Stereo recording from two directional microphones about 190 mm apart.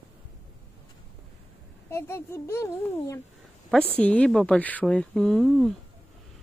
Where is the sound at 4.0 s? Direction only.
5° left (ahead or behind).